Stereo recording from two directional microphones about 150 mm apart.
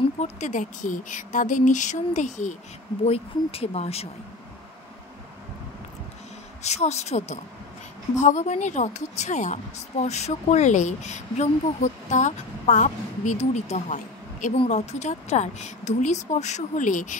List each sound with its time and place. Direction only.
0.2 s speech: 55° left (ahead or behind)
6.6 s speech: 45° left (ahead or behind)
14.5 s speech: 45° left (ahead or behind)